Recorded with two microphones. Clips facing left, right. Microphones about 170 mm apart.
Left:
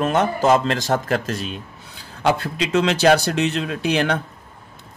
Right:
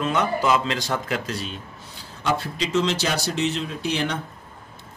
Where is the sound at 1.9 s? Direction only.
65° left (ahead or behind).